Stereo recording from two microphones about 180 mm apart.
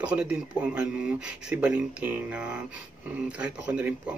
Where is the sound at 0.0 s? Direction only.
5° right (ahead or behind).